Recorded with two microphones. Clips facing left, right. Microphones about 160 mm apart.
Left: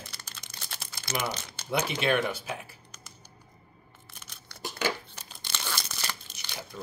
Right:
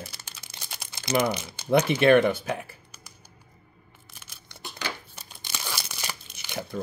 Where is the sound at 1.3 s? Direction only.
10° right (ahead or behind).